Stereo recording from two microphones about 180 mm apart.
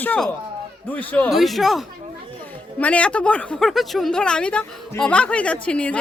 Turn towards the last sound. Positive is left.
turn(degrees=5)  # may be behind; listen again after turning